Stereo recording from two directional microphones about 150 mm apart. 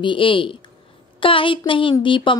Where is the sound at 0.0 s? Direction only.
35° left (ahead or behind).